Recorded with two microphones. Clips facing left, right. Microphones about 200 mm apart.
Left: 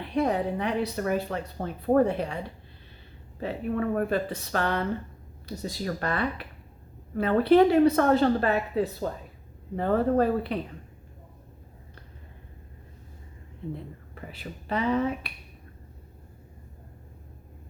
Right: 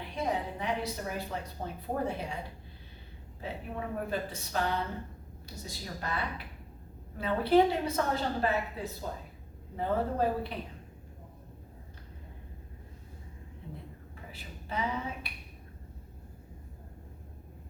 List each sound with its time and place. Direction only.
0.2 s a woman's voice: 65° left (ahead or behind)
3.4 s a woman's voice: 70° left (ahead or behind)
14.3 s a woman's voice: 70° left (ahead or behind)